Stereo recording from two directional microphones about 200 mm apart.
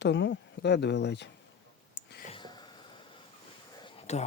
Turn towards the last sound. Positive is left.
turn(degrees=35)  # may be behind; listen again after turning